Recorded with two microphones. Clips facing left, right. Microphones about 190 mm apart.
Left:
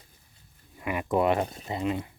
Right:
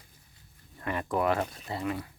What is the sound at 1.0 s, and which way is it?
Speech, 20° left (ahead or behind).